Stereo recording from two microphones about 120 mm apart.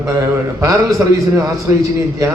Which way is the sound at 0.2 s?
25° right (ahead or behind).